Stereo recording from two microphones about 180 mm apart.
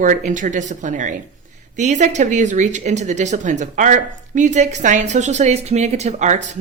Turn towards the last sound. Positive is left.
turn(degrees=-40)  # may be behind; listen again after turning